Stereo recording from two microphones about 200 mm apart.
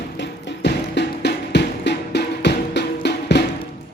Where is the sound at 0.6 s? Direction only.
55° left (ahead or behind).